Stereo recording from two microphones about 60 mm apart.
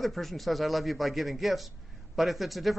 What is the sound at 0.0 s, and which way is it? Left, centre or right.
A man's voice, centre.